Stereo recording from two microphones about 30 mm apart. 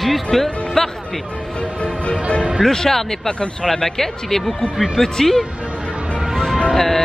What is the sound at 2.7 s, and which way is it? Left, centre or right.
Speech, centre.